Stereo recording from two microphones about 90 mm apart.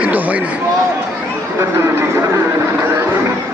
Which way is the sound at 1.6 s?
30° right (ahead or behind).